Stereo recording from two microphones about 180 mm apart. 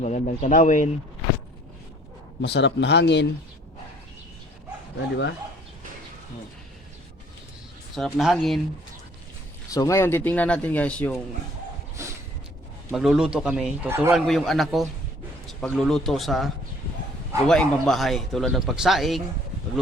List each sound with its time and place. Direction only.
0.0 s speech: 40° left (ahead or behind)
2.4 s speech: 75° left (ahead or behind)
7.9 s speech: centre (ahead or behind)
9.6 s speech: 20° left (ahead or behind)
12.9 s speech: 5° right (ahead or behind)
14.2 s speech: centre (ahead or behind)
17.5 s speech: centre (ahead or behind)